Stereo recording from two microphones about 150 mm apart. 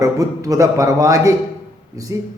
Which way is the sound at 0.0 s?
20° right (ahead or behind).